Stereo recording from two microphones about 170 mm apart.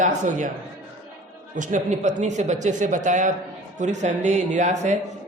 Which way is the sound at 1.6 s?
50° right (ahead or behind).